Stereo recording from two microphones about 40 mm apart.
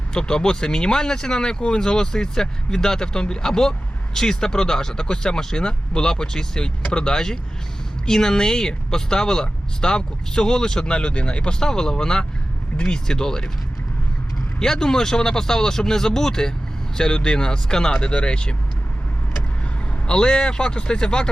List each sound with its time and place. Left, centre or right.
0.1 s speech: centre
11.6 s speech: centre
14.6 s speech: centre
20.1 s speech: left